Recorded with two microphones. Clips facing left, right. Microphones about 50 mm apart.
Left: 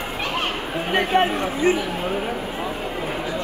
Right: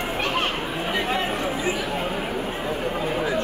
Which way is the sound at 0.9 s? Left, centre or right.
Left.